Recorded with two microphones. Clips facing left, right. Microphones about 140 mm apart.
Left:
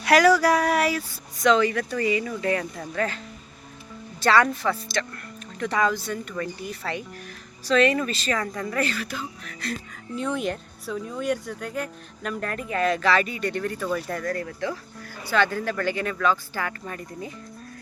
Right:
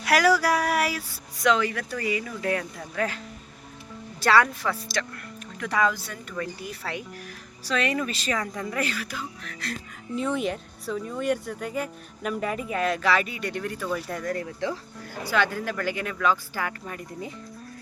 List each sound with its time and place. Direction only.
0.0 s speech: 5° right (ahead or behind)
4.2 s speech: 5° right (ahead or behind)